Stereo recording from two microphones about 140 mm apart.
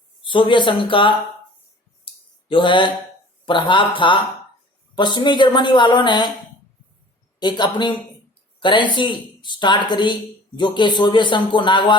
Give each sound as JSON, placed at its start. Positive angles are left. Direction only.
{"t": 0.3, "sound": "a woman's voice", "side_deg": 35}
{"t": 2.1, "sound": "a sound", "side_deg": 40}
{"t": 2.5, "sound": "a woman's voice", "side_deg": 35}
{"t": 7.3, "sound": "a woman's voice", "side_deg": 30}